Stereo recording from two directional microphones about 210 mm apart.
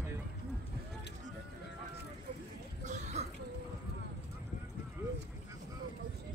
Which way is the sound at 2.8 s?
35° right (ahead or behind).